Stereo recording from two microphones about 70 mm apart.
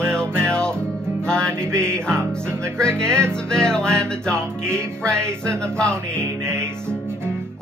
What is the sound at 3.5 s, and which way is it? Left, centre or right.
Music, centre.